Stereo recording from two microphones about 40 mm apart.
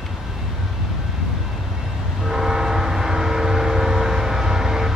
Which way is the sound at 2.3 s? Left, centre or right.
Centre.